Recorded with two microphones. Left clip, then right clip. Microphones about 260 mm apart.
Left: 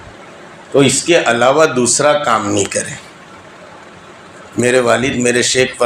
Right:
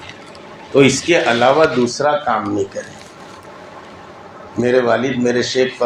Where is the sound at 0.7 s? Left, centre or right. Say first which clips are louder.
Left 1 dB; left.